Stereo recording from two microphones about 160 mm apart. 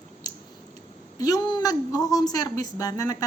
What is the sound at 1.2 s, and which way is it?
A man's voice, 25° left (ahead or behind).